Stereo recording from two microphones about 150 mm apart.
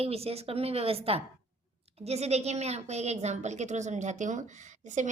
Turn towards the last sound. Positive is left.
turn(degrees=-55)  # may be behind; listen again after turning